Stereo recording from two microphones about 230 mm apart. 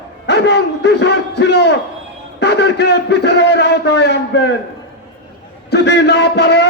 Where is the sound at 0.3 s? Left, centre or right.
Left.